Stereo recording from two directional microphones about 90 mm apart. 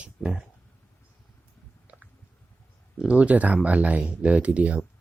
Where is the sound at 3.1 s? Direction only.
15° right (ahead or behind).